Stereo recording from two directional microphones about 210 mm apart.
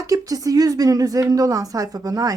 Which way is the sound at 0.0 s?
15° right (ahead or behind).